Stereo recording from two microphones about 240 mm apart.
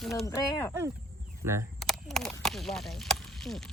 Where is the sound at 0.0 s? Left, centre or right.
Centre.